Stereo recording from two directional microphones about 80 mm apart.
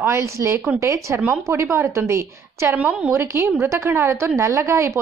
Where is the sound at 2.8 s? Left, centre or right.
Centre.